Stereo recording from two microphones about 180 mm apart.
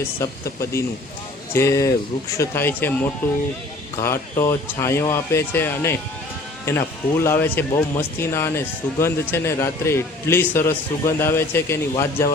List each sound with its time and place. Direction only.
0.0 s speech: 15° left (ahead or behind)